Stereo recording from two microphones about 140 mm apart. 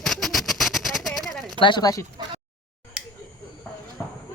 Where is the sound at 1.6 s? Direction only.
30° left (ahead or behind).